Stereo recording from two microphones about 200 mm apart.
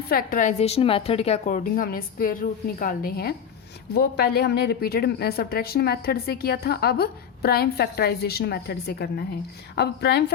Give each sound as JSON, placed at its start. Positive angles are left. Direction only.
{"t": 0.1, "sound": "a woman's voice", "side_deg": 45}